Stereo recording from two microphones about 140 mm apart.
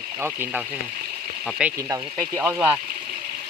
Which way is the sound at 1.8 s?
20° right (ahead or behind).